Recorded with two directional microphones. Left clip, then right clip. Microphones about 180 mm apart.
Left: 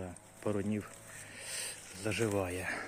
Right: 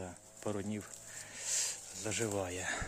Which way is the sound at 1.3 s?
10° right (ahead or behind).